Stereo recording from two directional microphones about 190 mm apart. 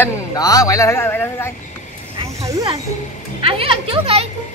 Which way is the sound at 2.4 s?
20° right (ahead or behind).